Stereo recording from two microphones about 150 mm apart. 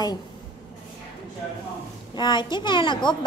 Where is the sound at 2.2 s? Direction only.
30° left (ahead or behind).